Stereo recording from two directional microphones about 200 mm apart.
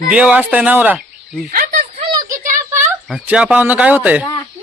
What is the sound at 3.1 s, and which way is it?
Speech, 5° right (ahead or behind).